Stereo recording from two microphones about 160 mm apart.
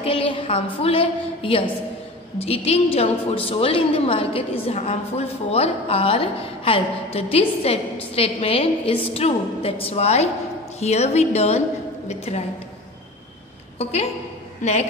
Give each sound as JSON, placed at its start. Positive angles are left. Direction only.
{"t": 0.0, "sound": "a sound", "side_deg": 35}
{"t": 0.7, "sound": "a woman's voice", "side_deg": 35}
{"t": 14.6, "sound": "a woman's voice", "side_deg": 45}